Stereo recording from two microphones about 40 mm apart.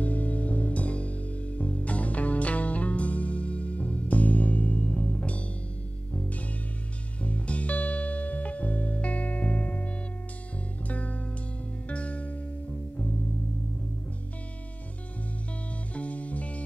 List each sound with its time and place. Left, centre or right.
0.0 s music: left
4.9 s music: left
7.2 s music: left
15.9 s music: left